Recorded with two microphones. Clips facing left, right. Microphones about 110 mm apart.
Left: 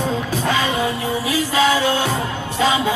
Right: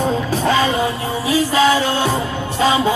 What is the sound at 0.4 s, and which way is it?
Music, 35° right (ahead or behind).